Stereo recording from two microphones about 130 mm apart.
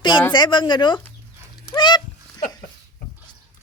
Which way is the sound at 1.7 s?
35° left (ahead or behind).